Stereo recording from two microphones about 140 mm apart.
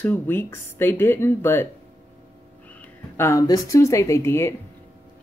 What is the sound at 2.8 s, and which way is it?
Speech, 15° left (ahead or behind).